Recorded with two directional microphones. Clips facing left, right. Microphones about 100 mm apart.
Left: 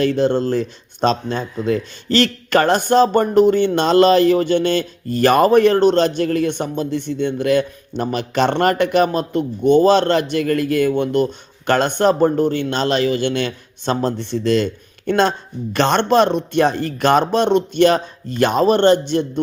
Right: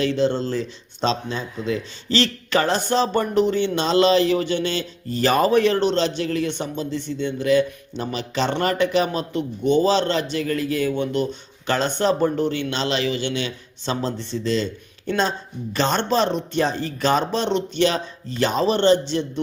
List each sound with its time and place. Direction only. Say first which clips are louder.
0.0 s speech: left 4 dB; 50° left (ahead or behind)